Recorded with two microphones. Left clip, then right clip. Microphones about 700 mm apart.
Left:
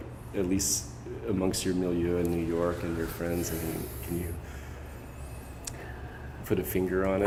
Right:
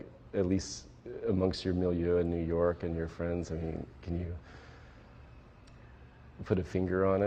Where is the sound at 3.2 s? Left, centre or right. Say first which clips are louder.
Left 3 dB; right.